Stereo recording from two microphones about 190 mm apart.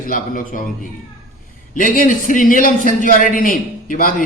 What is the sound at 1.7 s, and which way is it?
A man's voice, 45° left (ahead or behind).